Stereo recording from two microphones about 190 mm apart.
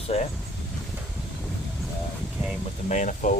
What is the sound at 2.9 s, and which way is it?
Speech, 40° left (ahead or behind).